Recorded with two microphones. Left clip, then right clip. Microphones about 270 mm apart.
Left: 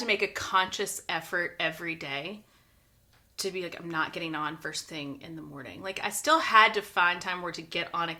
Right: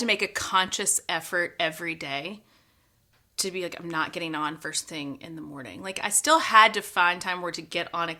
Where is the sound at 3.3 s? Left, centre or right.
Right.